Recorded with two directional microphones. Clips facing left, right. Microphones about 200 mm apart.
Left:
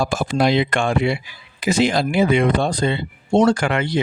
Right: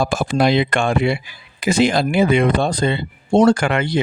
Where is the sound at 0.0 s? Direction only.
60° right (ahead or behind).